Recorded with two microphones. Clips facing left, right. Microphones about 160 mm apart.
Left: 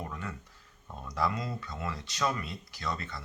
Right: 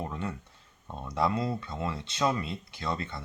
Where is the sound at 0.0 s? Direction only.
25° right (ahead or behind).